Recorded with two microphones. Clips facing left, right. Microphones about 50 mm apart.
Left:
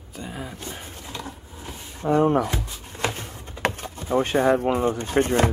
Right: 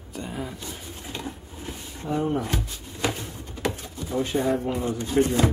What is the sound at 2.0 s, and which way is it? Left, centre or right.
Speech, left.